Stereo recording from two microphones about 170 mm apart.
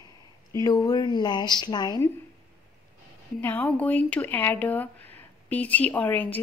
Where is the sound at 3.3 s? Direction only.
10° left (ahead or behind).